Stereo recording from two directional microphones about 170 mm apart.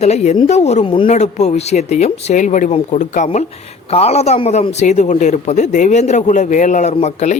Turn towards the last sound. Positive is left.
turn(degrees=45)  # may be behind; listen again after turning